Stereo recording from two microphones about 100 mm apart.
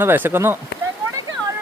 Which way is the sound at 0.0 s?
20° right (ahead or behind).